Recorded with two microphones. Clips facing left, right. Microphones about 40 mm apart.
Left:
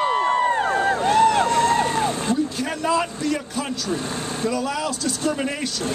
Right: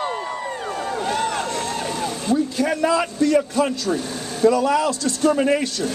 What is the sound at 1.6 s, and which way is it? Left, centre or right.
Vehicle, left.